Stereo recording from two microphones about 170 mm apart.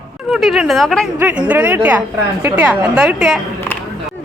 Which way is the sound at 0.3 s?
Centre (ahead or behind).